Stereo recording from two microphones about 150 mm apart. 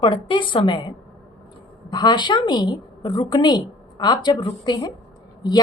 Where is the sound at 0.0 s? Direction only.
35° left (ahead or behind).